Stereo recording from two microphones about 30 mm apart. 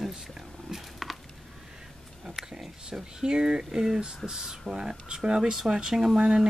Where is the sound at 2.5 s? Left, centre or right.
Right.